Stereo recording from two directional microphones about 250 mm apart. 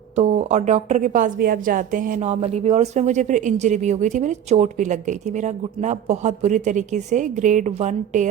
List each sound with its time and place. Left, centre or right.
0.2 s a woman's voice: right